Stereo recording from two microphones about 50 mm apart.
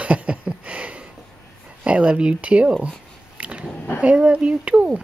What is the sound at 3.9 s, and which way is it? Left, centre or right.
Speech, right.